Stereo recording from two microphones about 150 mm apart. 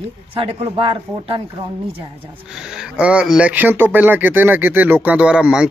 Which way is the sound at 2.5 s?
5° right (ahead or behind).